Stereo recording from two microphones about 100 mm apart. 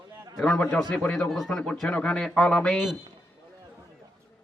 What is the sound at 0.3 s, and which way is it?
Speech, 5° left (ahead or behind).